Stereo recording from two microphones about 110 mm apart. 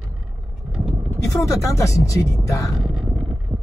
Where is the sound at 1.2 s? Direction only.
30° left (ahead or behind).